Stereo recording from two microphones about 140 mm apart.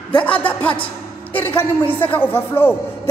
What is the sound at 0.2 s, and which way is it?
A woman's voice, 10° left (ahead or behind).